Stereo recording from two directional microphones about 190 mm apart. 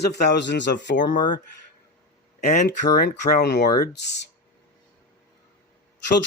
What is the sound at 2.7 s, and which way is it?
Speech, 60° left (ahead or behind).